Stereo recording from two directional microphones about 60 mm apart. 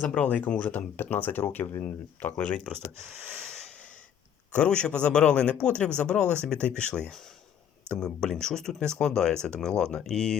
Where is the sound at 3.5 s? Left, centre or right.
Centre.